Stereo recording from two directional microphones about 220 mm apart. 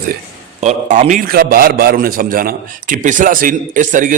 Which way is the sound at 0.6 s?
30° right (ahead or behind).